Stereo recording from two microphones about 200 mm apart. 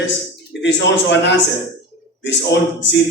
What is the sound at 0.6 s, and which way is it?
Speech, 60° left (ahead or behind).